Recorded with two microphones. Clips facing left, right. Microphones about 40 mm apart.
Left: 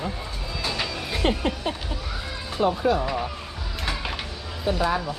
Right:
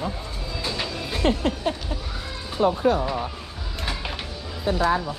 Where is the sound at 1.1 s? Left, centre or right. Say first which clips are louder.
Right 2 dB; left.